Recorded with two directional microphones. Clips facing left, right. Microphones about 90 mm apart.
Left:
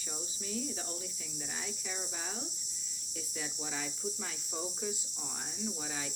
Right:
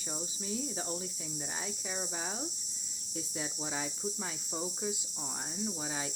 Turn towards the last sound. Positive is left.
turn(degrees=-25)  # may be behind; listen again after turning